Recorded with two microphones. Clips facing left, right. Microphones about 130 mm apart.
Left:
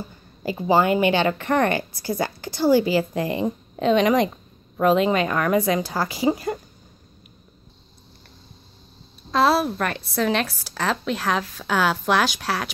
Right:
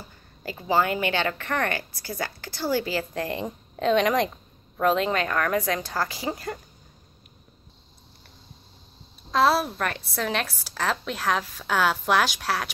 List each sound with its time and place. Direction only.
0.4 s a woman's voice: 20° left (ahead or behind)
9.3 s speech: centre (ahead or behind)